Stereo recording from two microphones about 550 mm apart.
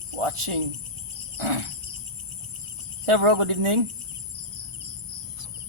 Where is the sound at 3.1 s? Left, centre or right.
Right.